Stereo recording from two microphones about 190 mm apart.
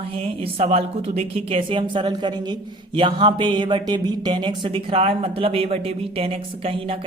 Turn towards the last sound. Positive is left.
turn(degrees=-30)  # may be behind; listen again after turning